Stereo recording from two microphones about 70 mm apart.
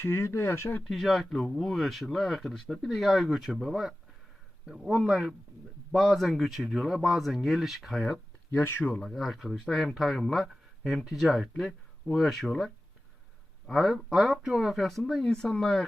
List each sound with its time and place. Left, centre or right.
0.0 s speech: left
0.9 s speech: centre
8.4 s speech: left
9.0 s speech: centre